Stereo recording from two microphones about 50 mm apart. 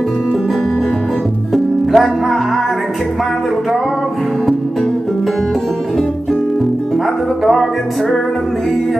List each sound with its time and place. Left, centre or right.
1.5 s music: centre